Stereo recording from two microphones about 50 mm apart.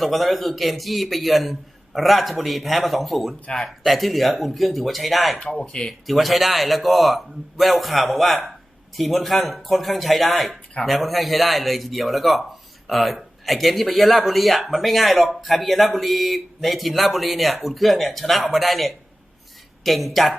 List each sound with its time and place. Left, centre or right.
0.0 s speech: centre
5.5 s speech: centre
6.1 s speech: centre